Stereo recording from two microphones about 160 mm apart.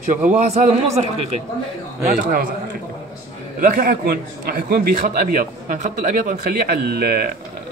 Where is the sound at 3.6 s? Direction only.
65° right (ahead or behind).